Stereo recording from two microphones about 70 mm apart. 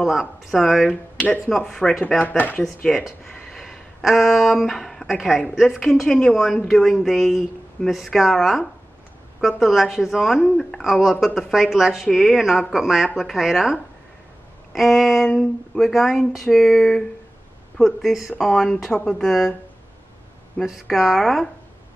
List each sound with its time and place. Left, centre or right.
0.0 s a woman's voice: centre; by 2.6 s left
2.6 s a woman's voice: centre
5.8 s a woman's voice: centre
20.6 s a woman's voice: centre